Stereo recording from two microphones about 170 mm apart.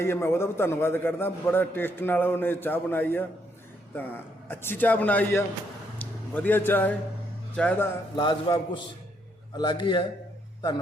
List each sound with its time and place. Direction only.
0.0 s a man's voice: 15° left (ahead or behind)
8.1 s a man's voice: 25° left (ahead or behind)